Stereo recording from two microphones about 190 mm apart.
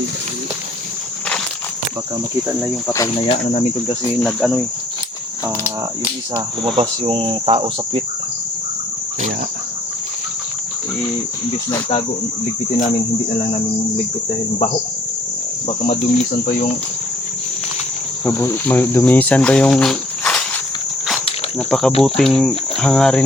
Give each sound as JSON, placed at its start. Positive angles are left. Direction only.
{"t": 2.6, "sound": "cricket", "side_deg": 15}
{"t": 3.2, "sound": "cricket", "side_deg": 30}
{"t": 4.2, "sound": "cricket", "side_deg": 0}
{"t": 6.7, "sound": "cricket", "side_deg": -30}
{"t": 18.3, "sound": "cricket", "side_deg": 10}
{"t": 21.7, "sound": "cricket", "side_deg": 5}